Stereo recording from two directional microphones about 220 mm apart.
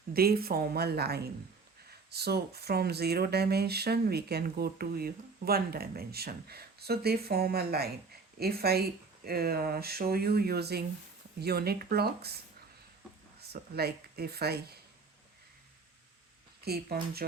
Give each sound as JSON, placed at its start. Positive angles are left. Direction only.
{"t": 0.1, "sound": "speech", "side_deg": -45}
{"t": 13.5, "sound": "speech", "side_deg": -45}
{"t": 16.6, "sound": "speech", "side_deg": -45}